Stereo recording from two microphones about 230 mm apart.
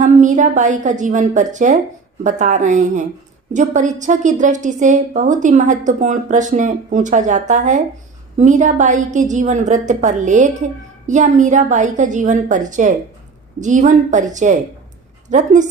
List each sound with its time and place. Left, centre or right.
0.0 s a woman's voice: right